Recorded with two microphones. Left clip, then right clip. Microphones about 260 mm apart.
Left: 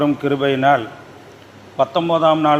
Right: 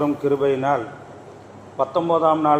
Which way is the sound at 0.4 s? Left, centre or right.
Left.